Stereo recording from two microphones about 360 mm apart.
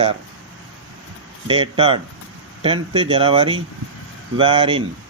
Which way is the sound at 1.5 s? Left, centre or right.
Centre.